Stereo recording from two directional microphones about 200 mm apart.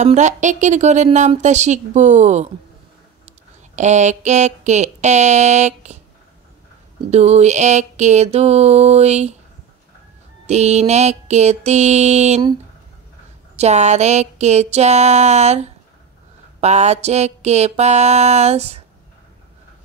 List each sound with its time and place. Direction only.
0.0 s speech: 35° right (ahead or behind)
3.7 s speech: 35° right (ahead or behind)
7.1 s speech: 35° right (ahead or behind)
10.4 s speech: 35° right (ahead or behind)
13.6 s speech: 35° right (ahead or behind)